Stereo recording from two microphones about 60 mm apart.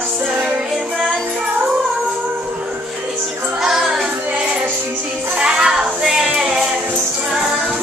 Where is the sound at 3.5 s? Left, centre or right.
Centre.